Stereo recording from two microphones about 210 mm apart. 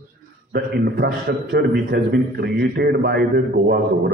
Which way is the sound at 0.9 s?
50° right (ahead or behind).